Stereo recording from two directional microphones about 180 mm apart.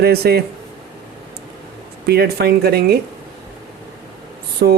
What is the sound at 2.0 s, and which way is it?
Speech, 60° right (ahead or behind).